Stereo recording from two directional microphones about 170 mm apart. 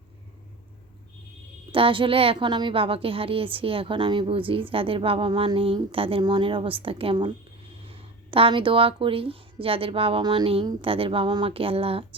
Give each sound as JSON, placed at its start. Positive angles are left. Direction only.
{"t": 1.7, "sound": "a woman's voice", "side_deg": -30}